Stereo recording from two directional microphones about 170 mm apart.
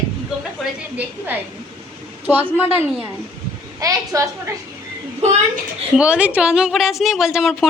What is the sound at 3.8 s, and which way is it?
Speech, 20° right (ahead or behind).